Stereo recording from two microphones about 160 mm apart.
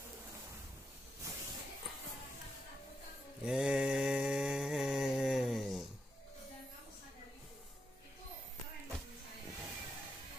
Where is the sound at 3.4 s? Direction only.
5° right (ahead or behind).